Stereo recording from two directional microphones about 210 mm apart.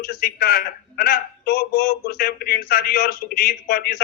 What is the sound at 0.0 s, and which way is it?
A man's voice, 45° left (ahead or behind).